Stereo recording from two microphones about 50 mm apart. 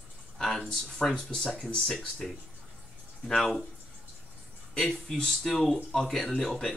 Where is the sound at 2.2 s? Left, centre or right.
Centre.